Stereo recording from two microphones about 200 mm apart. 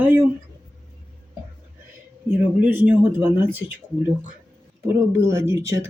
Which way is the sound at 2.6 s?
10° right (ahead or behind).